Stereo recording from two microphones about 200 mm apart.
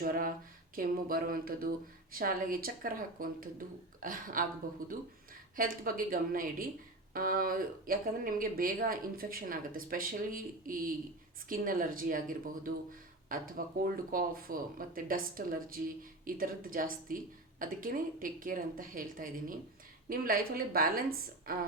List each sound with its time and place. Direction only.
0.0 s speech: 45° right (ahead or behind)